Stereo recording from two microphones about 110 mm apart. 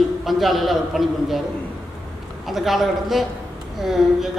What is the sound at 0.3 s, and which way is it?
Speech, centre (ahead or behind).